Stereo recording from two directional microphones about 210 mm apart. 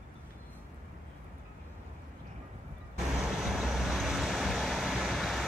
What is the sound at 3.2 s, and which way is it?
Vehicle, centre (ahead or behind).